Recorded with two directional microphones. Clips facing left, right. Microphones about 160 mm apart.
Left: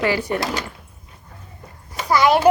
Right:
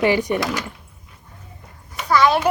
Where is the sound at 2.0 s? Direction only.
15° left (ahead or behind).